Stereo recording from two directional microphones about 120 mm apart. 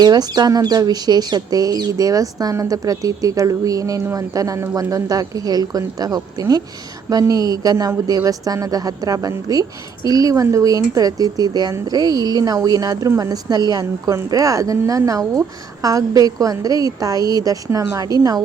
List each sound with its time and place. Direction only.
0.0 s speech: 35° right (ahead or behind)